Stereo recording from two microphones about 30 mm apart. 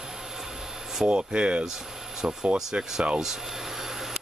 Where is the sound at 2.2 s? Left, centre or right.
Right.